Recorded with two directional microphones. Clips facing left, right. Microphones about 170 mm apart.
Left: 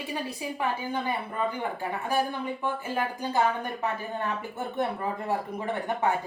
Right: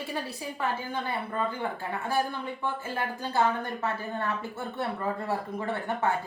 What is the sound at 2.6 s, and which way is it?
Speech, 15° left (ahead or behind).